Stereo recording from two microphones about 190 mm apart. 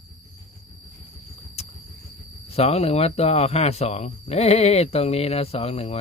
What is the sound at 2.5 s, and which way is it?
Speech, 35° left (ahead or behind).